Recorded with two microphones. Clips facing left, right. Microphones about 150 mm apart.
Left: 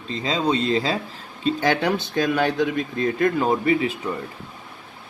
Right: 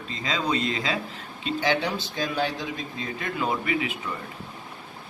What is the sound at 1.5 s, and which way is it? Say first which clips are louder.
A man's voice: left 5 dB; 45° left (ahead or behind).